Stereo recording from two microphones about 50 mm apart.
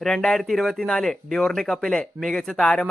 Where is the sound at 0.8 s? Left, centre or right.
Centre.